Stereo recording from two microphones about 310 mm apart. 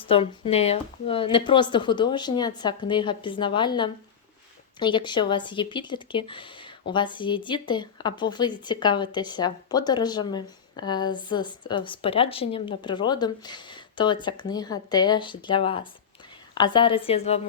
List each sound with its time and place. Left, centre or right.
0.0 s speech: centre